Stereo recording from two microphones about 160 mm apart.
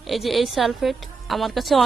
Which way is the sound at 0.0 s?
Centre (ahead or behind).